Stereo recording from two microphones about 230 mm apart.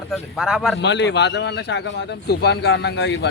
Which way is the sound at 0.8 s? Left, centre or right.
Left.